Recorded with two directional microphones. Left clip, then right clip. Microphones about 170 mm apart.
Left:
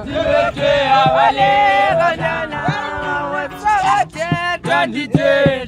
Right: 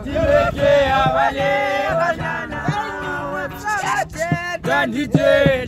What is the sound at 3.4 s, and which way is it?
Music, 45° left (ahead or behind).